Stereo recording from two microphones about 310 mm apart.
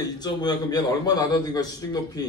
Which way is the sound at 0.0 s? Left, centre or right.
Centre.